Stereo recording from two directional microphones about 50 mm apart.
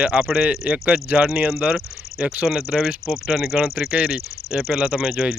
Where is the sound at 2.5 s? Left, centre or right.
Centre.